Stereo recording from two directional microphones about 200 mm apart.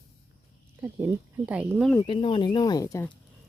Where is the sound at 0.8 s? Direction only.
10° right (ahead or behind).